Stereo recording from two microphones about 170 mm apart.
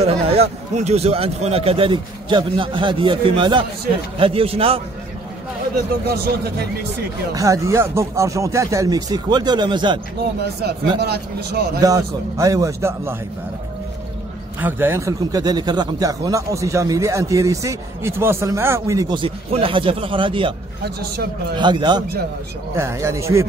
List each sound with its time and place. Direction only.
0.0 s speech: 35° right (ahead or behind)
6.0 s a man's voice: 65° right (ahead or behind)
7.3 s speech: 20° right (ahead or behind)
11.0 s a man's voice: 70° right (ahead or behind)
11.8 s speech: 20° right (ahead or behind)
14.6 s speech: 15° right (ahead or behind); by 20.5 s 30° right (ahead or behind)
21.5 s speech: 25° right (ahead or behind)
22.8 s speech: 15° right (ahead or behind)